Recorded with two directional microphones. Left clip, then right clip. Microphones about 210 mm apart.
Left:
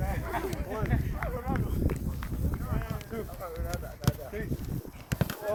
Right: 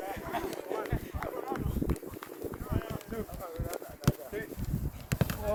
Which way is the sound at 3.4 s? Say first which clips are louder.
Left 1 dB; 55° right (ahead or behind).